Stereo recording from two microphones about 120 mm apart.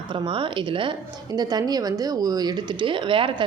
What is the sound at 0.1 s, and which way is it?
A woman's voice, 40° right (ahead or behind).